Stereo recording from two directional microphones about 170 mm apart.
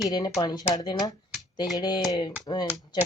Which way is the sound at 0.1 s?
25° left (ahead or behind).